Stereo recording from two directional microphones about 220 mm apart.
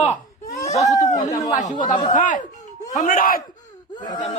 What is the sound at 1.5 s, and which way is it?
Speech, 35° left (ahead or behind).